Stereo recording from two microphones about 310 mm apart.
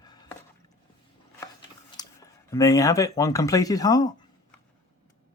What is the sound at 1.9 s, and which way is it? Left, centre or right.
Speech, centre.